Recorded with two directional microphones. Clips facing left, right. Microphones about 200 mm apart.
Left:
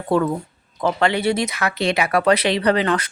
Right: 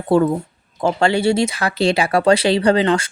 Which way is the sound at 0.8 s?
30° right (ahead or behind).